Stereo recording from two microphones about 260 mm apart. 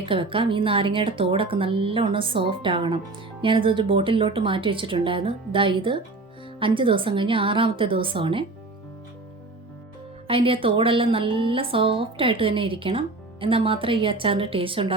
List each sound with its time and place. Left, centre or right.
0.0 s a woman's voice: centre
10.2 s a woman's voice: right